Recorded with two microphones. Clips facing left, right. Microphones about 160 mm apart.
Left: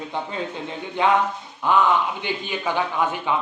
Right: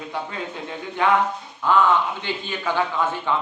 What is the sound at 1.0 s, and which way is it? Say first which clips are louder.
A man's voice: even; 20° left (ahead or behind).